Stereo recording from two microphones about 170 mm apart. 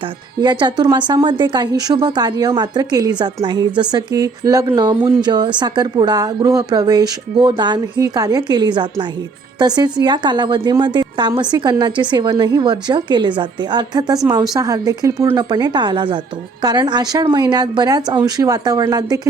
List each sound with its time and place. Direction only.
0.3 s speech: 25° right (ahead or behind)